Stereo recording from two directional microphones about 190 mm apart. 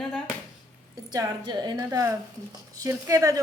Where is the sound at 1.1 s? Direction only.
20° right (ahead or behind).